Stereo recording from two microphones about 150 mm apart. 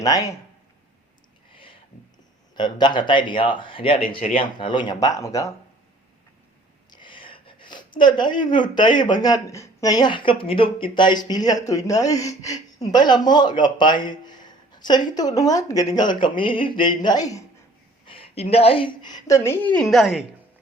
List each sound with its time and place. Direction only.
0.0 s speech: 25° left (ahead or behind)
2.6 s speech: 30° left (ahead or behind)
4.2 s speech: 65° left (ahead or behind)
4.5 s speech: 30° left (ahead or behind)
6.9 s speech: 35° left (ahead or behind)
18.0 s a woman's voice: 40° left (ahead or behind); by 20.2 s centre (ahead or behind)